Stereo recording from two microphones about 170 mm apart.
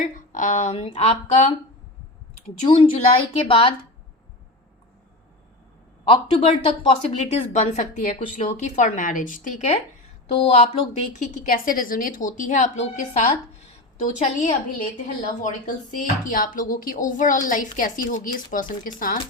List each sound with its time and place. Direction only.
0.0 s a woman's voice: 45° left (ahead or behind)
2.6 s speech: 35° left (ahead or behind)
6.1 s a woman's voice: 30° left (ahead or behind); by 19.2 s 55° left (ahead or behind)